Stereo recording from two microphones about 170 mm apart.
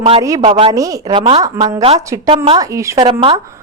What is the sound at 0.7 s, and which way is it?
A woman's voice, 20° right (ahead or behind).